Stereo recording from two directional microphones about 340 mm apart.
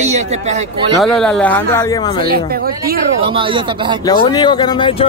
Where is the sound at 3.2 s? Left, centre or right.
Centre.